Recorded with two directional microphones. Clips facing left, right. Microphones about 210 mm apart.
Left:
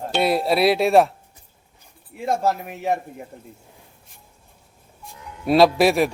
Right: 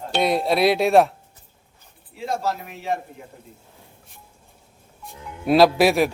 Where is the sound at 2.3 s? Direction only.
55° left (ahead or behind).